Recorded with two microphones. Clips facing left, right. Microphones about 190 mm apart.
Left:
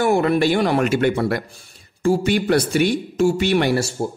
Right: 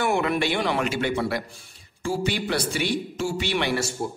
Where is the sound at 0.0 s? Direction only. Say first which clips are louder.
Left 6 dB; 40° left (ahead or behind).